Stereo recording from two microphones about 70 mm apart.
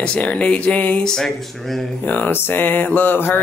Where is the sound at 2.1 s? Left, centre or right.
Left.